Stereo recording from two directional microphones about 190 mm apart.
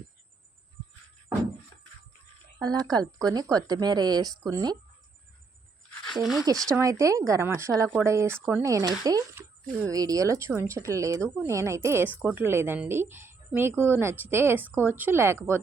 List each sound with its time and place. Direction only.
2.6 s speech: 20° right (ahead or behind)
6.1 s speech: centre (ahead or behind)
6.7 s speech: 15° right (ahead or behind)